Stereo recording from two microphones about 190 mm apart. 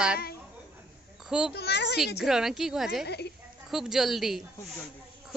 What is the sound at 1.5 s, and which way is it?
Speech, 60° left (ahead or behind).